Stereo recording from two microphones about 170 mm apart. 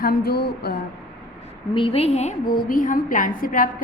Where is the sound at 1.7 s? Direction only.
30° left (ahead or behind); by 3.7 s 55° left (ahead or behind).